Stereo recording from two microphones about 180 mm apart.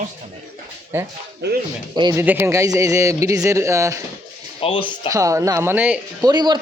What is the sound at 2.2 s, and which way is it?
Speech, 10° right (ahead or behind).